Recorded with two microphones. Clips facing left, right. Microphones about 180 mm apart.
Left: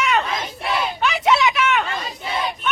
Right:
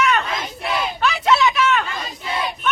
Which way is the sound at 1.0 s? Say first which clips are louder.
Right 1 dB; 10° left (ahead or behind).